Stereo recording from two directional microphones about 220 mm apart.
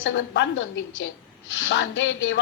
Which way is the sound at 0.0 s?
60° left (ahead or behind).